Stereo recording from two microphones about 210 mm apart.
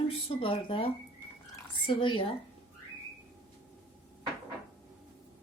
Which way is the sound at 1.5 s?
25° left (ahead or behind).